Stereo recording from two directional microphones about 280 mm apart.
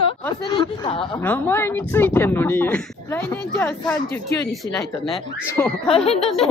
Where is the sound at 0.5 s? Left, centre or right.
Centre.